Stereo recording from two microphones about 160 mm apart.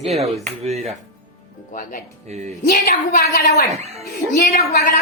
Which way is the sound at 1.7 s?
55° left (ahead or behind).